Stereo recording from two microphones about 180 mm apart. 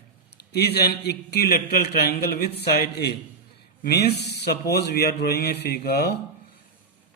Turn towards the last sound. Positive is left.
turn(degrees=65)  # may be behind; listen again after turning